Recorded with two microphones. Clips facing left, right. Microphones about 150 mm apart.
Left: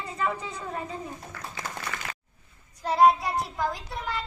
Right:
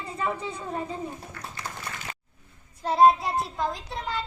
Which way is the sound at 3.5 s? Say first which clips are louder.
Even; 25° right (ahead or behind).